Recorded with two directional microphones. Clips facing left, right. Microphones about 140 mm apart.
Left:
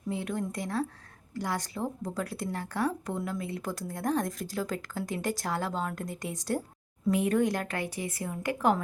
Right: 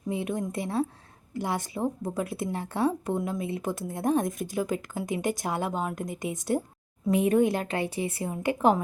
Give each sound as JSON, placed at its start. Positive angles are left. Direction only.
{"t": 0.1, "sound": "a woman's voice", "side_deg": -20}